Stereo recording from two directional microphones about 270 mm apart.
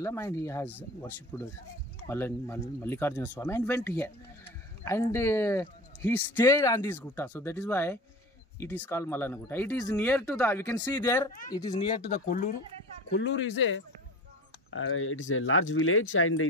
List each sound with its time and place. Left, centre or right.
0.0 s speech: centre
12.3 s speech: left
13.1 s speech: left